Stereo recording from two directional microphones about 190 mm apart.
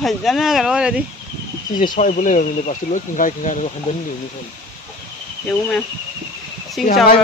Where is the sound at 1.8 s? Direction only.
45° left (ahead or behind).